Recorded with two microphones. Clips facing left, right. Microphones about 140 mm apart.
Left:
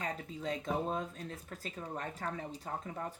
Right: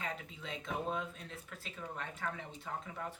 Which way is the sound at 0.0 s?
40° left (ahead or behind).